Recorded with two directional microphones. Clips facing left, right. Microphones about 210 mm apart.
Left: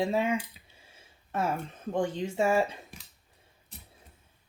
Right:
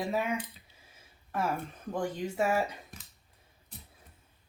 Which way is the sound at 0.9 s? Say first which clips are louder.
Left 2 dB; 25° left (ahead or behind).